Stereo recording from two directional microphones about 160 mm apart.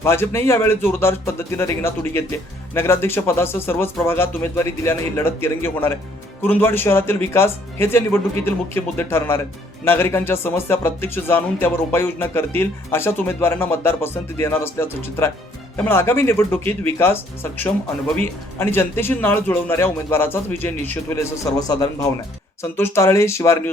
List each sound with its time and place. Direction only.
0.0 s speech: 15° left (ahead or behind)